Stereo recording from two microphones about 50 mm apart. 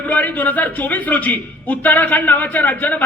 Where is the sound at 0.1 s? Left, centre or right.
Left.